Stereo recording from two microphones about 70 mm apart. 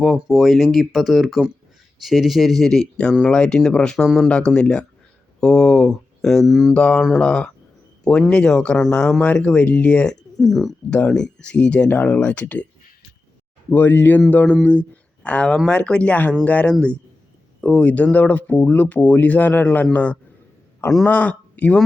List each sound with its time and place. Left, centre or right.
0.0 s speech: centre
4.3 s speech: centre
6.4 s speech: centre
6.7 s speech: centre
10.4 s speech: centre
10.9 s speech: centre
13.7 s speech: left